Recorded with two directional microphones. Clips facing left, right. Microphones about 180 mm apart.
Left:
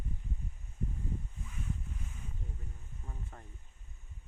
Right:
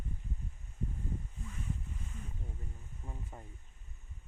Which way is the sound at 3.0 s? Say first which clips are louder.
Right 2 dB; 15° right (ahead or behind).